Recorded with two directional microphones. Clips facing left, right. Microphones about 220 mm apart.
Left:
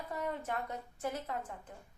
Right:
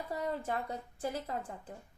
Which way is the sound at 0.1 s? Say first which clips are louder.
Right 2 dB; 30° right (ahead or behind).